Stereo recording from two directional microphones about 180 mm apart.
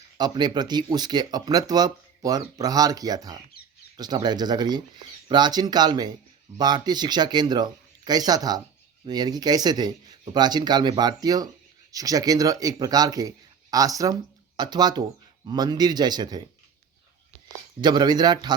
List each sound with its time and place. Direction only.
0.2 s speech: 25° right (ahead or behind)
17.7 s speech: 25° right (ahead or behind)